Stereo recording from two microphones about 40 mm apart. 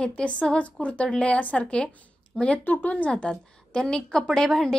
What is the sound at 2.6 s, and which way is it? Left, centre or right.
Speech, left.